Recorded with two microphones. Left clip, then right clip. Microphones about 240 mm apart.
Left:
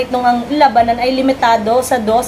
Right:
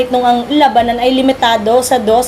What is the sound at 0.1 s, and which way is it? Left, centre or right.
A woman's voice, right.